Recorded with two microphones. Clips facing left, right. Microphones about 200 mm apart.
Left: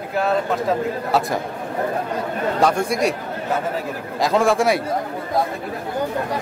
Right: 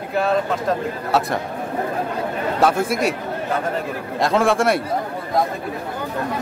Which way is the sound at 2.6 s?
5° right (ahead or behind).